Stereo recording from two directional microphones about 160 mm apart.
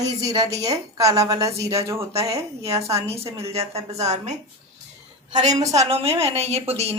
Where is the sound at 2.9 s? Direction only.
40° right (ahead or behind).